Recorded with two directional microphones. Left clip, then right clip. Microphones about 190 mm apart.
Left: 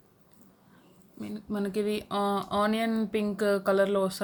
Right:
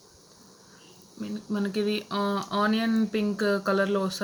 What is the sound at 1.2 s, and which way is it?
Speech, 45° left (ahead or behind).